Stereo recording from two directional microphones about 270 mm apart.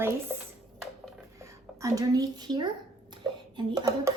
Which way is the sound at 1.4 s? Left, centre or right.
Centre.